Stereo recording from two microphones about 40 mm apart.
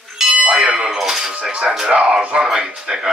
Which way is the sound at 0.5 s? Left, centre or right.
Right.